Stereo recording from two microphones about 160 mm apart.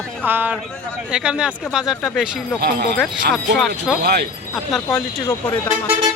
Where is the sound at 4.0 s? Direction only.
90° right.